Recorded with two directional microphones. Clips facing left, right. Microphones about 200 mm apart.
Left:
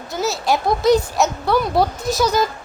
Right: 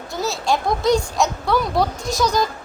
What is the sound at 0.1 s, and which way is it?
A child's voice, centre (ahead or behind).